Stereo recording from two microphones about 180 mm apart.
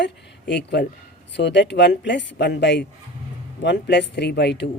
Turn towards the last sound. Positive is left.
turn(degrees=70)  # may be behind; listen again after turning